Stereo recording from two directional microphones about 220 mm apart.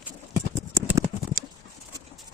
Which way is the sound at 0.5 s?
15° right (ahead or behind).